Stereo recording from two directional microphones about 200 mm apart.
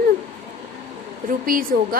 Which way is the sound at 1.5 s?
45° right (ahead or behind).